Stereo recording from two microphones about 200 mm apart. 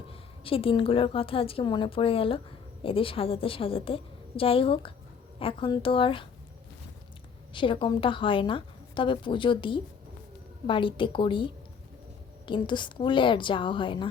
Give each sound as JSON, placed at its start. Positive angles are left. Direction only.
{"t": 0.1, "sound": "a woman's voice", "side_deg": 30}
{"t": 7.5, "sound": "a woman's voice", "side_deg": 25}